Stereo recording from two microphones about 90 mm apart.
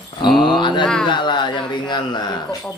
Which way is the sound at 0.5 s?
60° left (ahead or behind).